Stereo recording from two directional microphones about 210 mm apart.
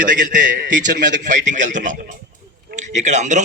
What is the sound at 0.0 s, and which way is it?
A man's voice, 40° right (ahead or behind).